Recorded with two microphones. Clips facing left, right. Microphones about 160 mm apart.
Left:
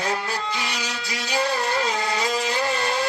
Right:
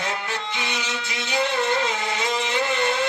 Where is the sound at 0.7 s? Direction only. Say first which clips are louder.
Right 1 dB; 35° left (ahead or behind).